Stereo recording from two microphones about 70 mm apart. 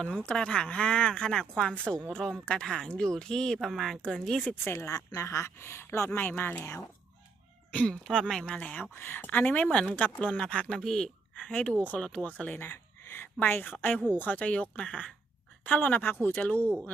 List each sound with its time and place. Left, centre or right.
0.1 s speech: centre
4.4 s speech: left
4.8 s speech: left
5.2 s speech: left
7.7 s speech: centre
10.8 s speech: centre
11.4 s speech: centre
13.1 s speech: left